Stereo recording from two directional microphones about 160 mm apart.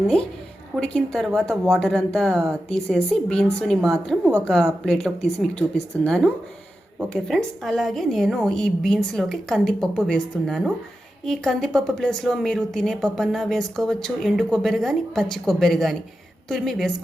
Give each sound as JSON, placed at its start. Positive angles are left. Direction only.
{"t": 0.8, "sound": "a woman's voice", "side_deg": 5}
{"t": 4.2, "sound": "speech", "side_deg": -15}
{"t": 4.9, "sound": "a woman's voice", "side_deg": 5}